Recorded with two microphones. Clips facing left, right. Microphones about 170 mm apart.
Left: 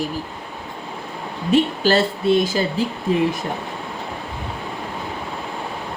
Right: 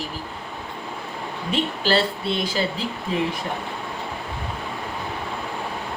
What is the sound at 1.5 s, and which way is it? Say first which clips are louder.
Speech: left 5 dB; 45° left (ahead or behind).